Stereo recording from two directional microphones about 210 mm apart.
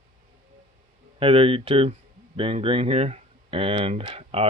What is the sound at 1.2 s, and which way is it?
Speech, 25° right (ahead or behind).